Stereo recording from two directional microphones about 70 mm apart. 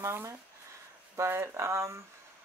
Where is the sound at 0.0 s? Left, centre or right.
Right.